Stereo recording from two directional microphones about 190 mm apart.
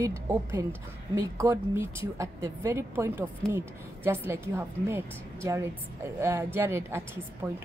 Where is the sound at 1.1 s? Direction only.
15° right (ahead or behind).